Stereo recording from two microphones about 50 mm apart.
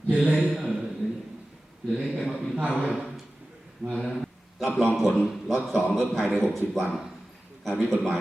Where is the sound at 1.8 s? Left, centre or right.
Centre.